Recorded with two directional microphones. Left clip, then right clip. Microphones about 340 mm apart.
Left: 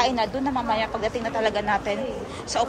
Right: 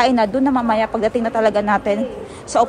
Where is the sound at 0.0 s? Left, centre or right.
Centre.